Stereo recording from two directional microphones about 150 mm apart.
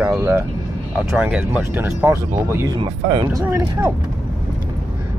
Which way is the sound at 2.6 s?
30° right (ahead or behind).